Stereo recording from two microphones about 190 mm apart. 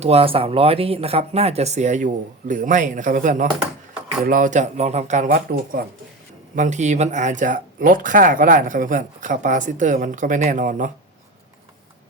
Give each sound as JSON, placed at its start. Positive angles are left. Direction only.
{"t": 0.0, "sound": "speech", "side_deg": -30}